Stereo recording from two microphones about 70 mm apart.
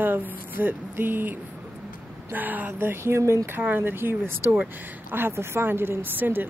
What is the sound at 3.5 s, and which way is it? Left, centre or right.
A woman's voice, right.